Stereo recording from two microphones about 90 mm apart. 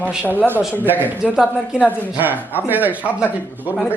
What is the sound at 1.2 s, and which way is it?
Speech, 10° right (ahead or behind).